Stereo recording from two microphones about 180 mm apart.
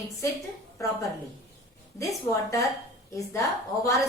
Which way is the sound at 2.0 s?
15° left (ahead or behind).